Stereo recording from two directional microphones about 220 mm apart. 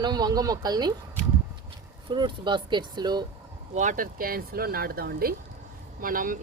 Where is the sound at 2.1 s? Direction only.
20° right (ahead or behind).